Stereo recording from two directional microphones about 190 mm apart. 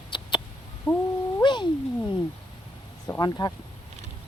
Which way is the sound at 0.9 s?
25° left (ahead or behind).